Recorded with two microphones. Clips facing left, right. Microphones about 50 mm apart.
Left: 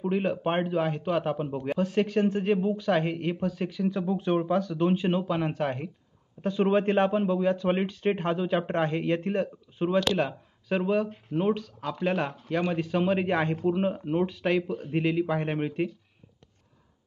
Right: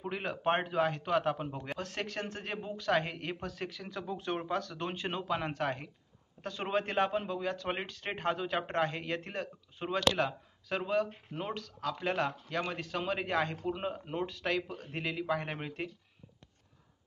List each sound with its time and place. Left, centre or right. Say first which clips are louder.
0.0 s a man's voice: left 7 dB; centre
6.7 s speech: left 6 dB; left
7.1 s speech: left 9 dB; centre
9.8 s a man's voice: left 5 dB; centre